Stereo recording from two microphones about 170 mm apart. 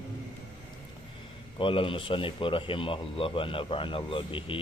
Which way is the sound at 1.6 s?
30° left (ahead or behind).